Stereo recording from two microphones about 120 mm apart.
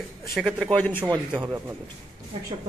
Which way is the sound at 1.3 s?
15° right (ahead or behind).